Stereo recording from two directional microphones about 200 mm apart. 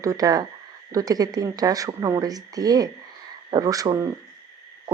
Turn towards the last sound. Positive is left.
turn(degrees=-15)  # may be behind; listen again after turning